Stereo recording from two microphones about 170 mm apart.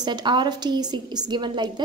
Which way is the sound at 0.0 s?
25° right (ahead or behind).